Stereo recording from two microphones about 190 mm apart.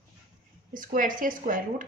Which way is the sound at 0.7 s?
45° right (ahead or behind).